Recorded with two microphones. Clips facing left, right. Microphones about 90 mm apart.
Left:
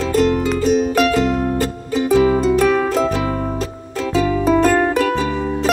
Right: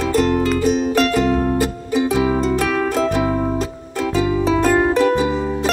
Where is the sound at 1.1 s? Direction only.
15° right (ahead or behind).